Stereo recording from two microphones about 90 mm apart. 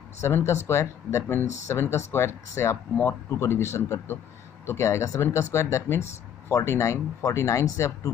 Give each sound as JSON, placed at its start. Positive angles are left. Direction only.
{"t": 0.2, "sound": "speech", "side_deg": 30}